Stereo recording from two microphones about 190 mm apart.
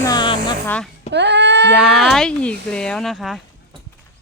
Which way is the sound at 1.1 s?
65° right (ahead or behind).